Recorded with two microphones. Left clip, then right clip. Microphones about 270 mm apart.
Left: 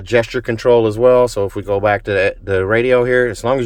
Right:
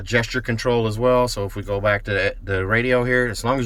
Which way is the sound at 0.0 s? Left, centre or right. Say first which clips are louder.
Left 6 dB; centre.